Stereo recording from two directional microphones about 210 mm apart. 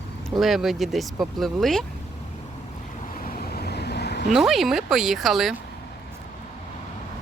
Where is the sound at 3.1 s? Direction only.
40° left (ahead or behind).